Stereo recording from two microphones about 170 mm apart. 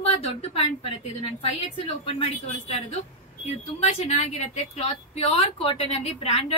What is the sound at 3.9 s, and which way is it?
A woman's voice, 40° left (ahead or behind).